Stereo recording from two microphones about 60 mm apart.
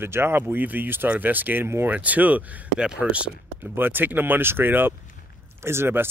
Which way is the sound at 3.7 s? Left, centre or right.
Right.